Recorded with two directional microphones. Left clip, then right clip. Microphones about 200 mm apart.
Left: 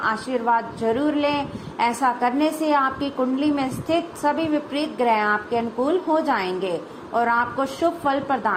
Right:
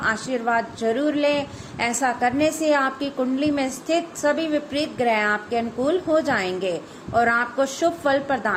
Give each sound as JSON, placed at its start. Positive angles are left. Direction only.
{"t": 0.0, "sound": "a woman's voice", "side_deg": -15}